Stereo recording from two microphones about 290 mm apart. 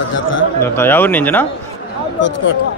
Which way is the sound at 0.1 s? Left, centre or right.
Left.